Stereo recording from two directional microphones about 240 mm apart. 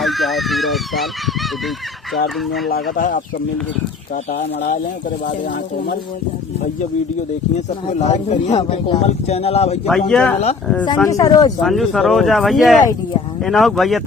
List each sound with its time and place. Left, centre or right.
0.0 s speech: centre
2.9 s speech: left
7.9 s speech: left
10.1 s speech: centre
10.8 s speech: centre
11.6 s speech: centre